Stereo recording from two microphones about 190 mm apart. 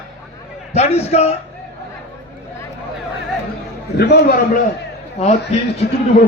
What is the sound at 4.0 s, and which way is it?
Speech, 55° left (ahead or behind).